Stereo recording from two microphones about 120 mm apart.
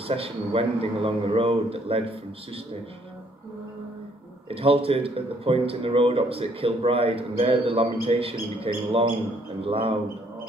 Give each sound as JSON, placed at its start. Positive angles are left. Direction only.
{"t": 0.1, "sound": "speech", "side_deg": -55}
{"t": 4.5, "sound": "speech", "side_deg": -50}